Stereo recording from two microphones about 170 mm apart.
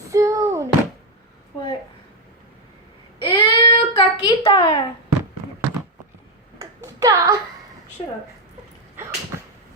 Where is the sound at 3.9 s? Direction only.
30° left (ahead or behind).